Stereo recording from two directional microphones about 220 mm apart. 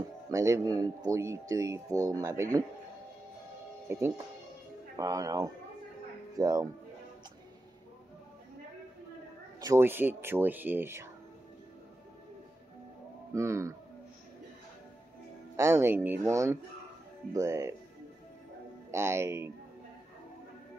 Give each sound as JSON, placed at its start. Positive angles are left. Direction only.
{"t": 0.3, "sound": "speech", "side_deg": -15}
{"t": 3.9, "sound": "speech", "side_deg": -15}
{"t": 9.6, "sound": "speech", "side_deg": -10}
{"t": 13.3, "sound": "speech", "side_deg": -15}
{"t": 15.5, "sound": "speech", "side_deg": -10}
{"t": 18.9, "sound": "speech", "side_deg": -10}